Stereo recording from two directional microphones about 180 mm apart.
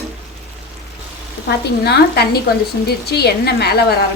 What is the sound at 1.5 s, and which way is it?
A woman's voice, 65° left (ahead or behind).